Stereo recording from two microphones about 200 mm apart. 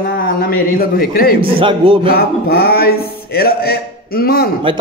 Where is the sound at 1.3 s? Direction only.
25° right (ahead or behind).